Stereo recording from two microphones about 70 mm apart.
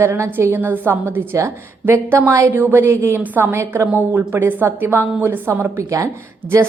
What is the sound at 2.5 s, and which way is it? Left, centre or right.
A woman's voice, right.